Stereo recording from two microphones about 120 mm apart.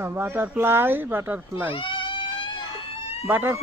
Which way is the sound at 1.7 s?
45° left (ahead or behind).